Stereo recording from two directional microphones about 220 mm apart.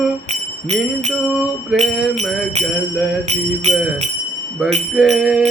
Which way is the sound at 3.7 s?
30° right (ahead or behind).